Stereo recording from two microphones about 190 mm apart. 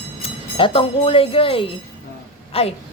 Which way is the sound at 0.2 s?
30° left (ahead or behind).